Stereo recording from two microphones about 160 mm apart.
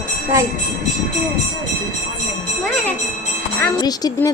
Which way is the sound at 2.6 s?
10° left (ahead or behind).